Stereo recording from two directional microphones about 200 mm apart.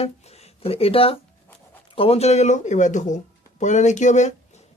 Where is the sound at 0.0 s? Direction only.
30° left (ahead or behind).